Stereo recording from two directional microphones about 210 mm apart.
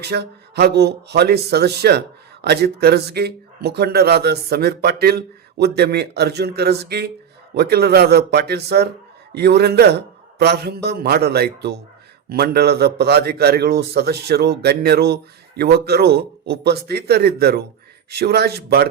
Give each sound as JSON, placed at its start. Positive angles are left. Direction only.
{"t": 0.0, "sound": "speech", "side_deg": -50}